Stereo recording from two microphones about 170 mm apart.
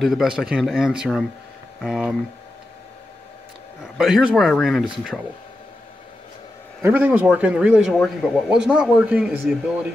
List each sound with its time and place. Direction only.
0.0 s a man's voice: centre (ahead or behind)
4.0 s a man's voice: 5° right (ahead or behind)
6.8 s a man's voice: 10° right (ahead or behind)